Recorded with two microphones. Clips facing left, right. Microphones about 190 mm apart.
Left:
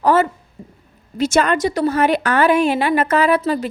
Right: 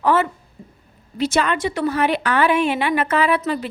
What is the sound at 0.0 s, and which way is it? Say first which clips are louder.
A woman's voice: left 3 dB; 40° left (ahead or behind).